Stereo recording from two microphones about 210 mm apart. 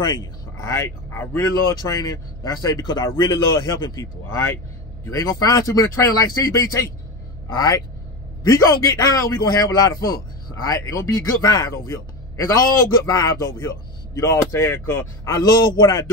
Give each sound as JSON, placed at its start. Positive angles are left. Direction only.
{"t": 0.0, "sound": "speech", "side_deg": 20}